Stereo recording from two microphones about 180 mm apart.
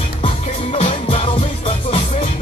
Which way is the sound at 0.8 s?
30° left (ahead or behind).